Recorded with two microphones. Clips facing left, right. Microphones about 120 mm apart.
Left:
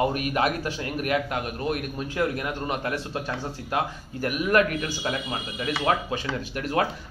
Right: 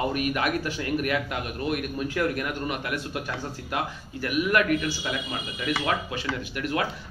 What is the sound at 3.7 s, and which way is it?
Speech, 40° left (ahead or behind).